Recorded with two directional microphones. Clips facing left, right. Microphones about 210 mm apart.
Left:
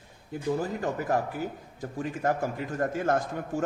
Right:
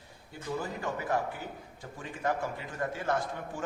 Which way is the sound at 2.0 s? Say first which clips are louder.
Left 5 dB; 45° left (ahead or behind).